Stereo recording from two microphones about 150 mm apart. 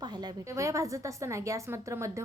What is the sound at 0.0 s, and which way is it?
A woman's voice, 25° right (ahead or behind).